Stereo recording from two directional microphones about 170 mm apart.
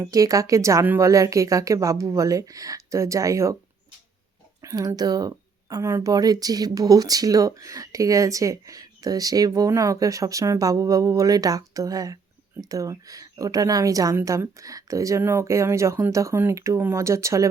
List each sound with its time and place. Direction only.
0.0 s speech: 20° right (ahead or behind)
4.6 s a woman's voice: 20° right (ahead or behind)